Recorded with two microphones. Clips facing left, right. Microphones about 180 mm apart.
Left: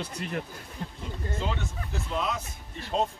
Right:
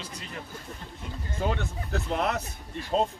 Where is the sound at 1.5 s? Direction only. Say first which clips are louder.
Right 3 dB; 60° right (ahead or behind).